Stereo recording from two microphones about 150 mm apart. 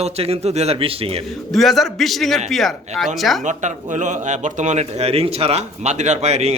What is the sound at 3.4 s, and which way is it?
Speech, 55° right (ahead or behind).